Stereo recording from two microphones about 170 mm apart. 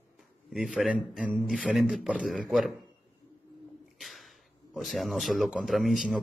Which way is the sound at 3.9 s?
Centre (ahead or behind).